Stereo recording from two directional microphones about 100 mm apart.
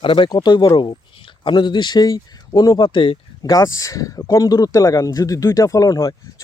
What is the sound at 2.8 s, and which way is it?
Speech, 60° left (ahead or behind).